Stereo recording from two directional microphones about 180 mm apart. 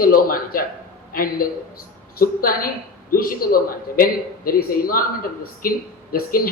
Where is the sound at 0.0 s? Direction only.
55° left (ahead or behind).